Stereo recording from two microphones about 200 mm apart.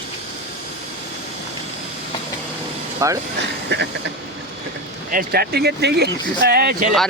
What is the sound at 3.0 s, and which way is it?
Speech, 15° right (ahead or behind).